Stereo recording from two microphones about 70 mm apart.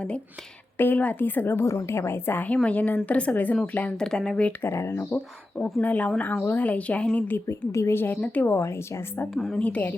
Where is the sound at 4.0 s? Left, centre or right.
Centre.